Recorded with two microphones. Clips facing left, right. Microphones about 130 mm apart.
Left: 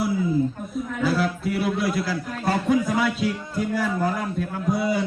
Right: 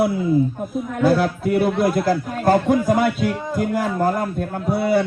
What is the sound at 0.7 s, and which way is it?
A man's voice, 55° right (ahead or behind).